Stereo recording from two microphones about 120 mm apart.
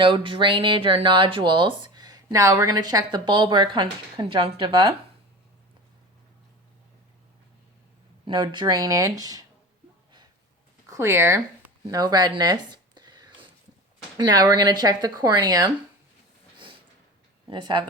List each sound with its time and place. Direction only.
0.0 s speech: 45° right (ahead or behind)
8.2 s speech: 40° right (ahead or behind)
10.8 s speech: 25° right (ahead or behind)
11.9 s a sound: 30° right (ahead or behind)
14.3 s speech: 35° right (ahead or behind)
17.5 s speech: 40° right (ahead or behind)